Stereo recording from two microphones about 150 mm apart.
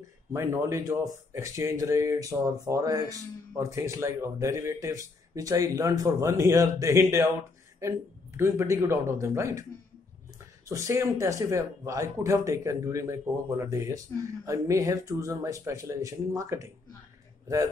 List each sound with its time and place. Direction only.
0.3 s speech: 20° right (ahead or behind)
10.7 s speech: 20° right (ahead or behind)